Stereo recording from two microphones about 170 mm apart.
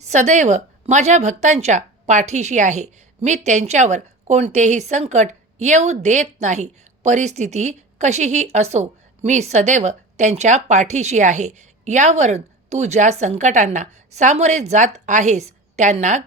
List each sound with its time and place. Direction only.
0.0 s speech: 45° right (ahead or behind)